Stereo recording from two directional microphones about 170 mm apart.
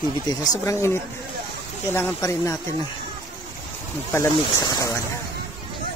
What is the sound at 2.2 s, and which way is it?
Speech, 15° left (ahead or behind).